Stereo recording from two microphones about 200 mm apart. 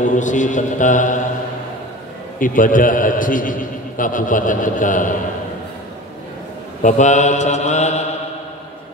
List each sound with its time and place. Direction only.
0.0 s mantra: 40° left (ahead or behind)
2.3 s a man's voice: 40° left (ahead or behind)
6.8 s mantra: 35° left (ahead or behind)